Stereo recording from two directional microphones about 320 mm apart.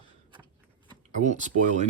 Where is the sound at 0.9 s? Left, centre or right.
Right.